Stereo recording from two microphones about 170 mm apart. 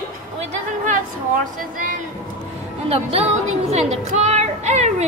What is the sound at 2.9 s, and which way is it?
A woman's voice, 35° right (ahead or behind).